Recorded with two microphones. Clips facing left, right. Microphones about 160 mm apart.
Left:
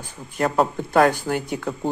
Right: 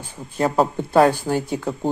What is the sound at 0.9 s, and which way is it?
Speech, 25° right (ahead or behind).